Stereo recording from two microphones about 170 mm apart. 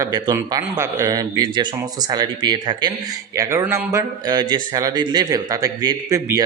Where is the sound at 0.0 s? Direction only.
20° right (ahead or behind).